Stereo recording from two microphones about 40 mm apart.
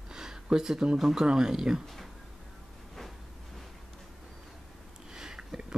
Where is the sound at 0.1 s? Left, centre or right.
Centre.